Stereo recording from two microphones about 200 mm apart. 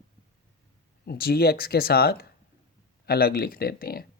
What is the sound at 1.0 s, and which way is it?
Speech, 50° left (ahead or behind).